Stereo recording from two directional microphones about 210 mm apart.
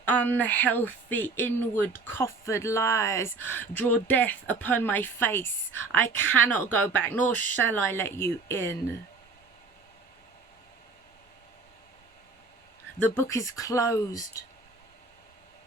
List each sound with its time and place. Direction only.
0.0 s speech: 10° left (ahead or behind)
13.1 s speech: 15° left (ahead or behind)